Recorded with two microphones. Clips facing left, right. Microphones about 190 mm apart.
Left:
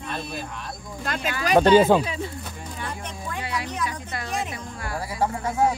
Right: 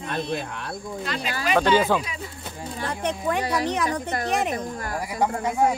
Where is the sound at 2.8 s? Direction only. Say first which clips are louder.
Right 10 dB; 75° right (ahead or behind).